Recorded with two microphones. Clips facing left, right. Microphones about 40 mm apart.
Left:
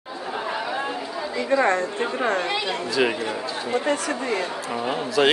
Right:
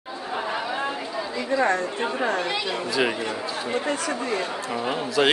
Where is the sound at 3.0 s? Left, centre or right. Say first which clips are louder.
Left 2 dB; centre.